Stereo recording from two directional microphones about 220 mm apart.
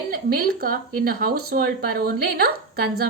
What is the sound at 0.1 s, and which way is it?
A woman's voice, 40° right (ahead or behind).